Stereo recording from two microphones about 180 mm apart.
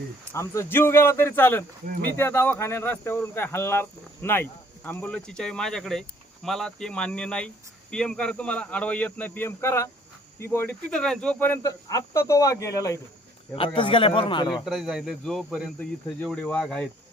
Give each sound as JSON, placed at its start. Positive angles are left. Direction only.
{"t": 0.3, "sound": "speech", "side_deg": 15}
{"t": 13.6, "sound": "a man's voice", "side_deg": 30}
{"t": 14.6, "sound": "speech", "side_deg": 0}